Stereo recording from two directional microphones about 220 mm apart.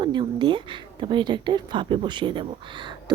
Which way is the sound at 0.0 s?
20° right (ahead or behind).